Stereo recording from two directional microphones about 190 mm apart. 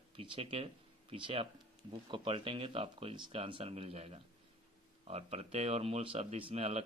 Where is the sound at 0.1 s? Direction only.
30° right (ahead or behind).